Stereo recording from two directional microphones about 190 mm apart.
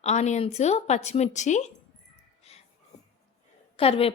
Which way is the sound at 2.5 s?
35° left (ahead or behind).